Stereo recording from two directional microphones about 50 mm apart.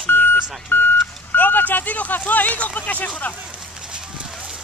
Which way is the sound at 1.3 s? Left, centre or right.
Left.